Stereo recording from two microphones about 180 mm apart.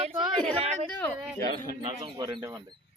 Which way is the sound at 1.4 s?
50° right (ahead or behind).